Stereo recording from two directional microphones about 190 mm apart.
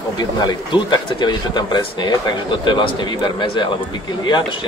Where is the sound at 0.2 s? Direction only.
20° left (ahead or behind).